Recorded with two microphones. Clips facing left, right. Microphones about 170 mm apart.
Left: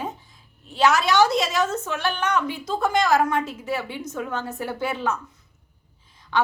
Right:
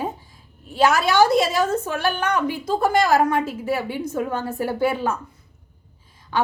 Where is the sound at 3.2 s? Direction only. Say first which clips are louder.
Right 3 dB; 5° right (ahead or behind).